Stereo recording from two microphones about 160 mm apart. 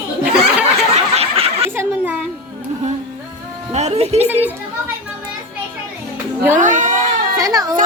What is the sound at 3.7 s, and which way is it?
Music, 45° right (ahead or behind).